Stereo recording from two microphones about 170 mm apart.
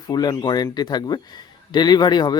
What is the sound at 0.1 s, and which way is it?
Speech, 25° left (ahead or behind).